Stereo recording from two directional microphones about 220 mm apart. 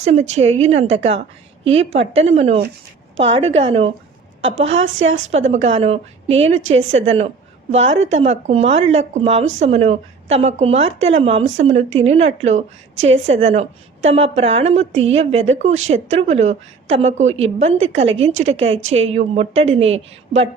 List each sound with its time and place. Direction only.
0.0 s a woman's voice: 30° right (ahead or behind)
4.5 s a woman's voice: 60° right (ahead or behind)
5.5 s a woman's voice: 30° right (ahead or behind)
6.5 s a woman's voice: 60° right (ahead or behind)
6.7 s a woman's voice: 30° right (ahead or behind)